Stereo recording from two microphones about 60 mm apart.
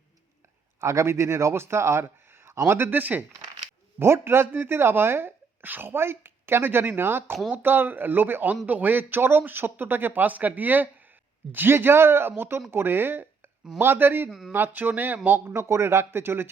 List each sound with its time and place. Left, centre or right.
0.8 s speech: right
4.0 s speech: right
14.3 s speech: centre
14.5 s speech: right
15.4 s speech: right